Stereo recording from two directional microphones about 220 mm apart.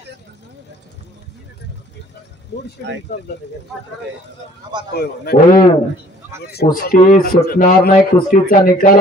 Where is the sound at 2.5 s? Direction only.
50° left (ahead or behind).